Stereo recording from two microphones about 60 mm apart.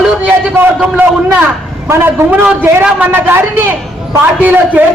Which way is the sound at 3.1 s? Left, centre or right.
Right.